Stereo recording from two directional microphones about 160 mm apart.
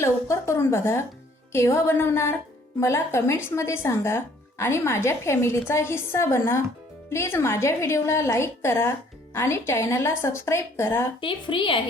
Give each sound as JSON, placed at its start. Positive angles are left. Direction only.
{"t": 0.0, "sound": "a woman's voice", "side_deg": 20}
{"t": 11.2, "sound": "a woman's voice", "side_deg": 30}